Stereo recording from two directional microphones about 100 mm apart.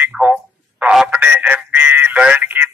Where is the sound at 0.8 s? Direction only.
10° right (ahead or behind).